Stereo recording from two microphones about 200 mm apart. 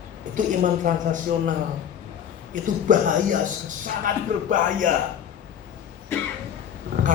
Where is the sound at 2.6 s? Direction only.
40° right (ahead or behind).